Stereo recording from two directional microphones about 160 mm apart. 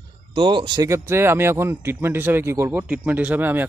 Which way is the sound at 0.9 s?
15° right (ahead or behind).